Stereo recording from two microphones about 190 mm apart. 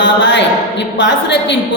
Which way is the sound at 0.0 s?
70° left (ahead or behind).